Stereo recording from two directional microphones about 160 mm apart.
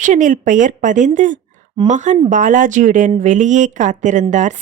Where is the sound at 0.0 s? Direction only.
50° right (ahead or behind).